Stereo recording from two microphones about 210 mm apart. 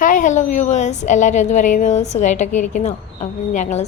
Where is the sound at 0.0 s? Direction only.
40° left (ahead or behind).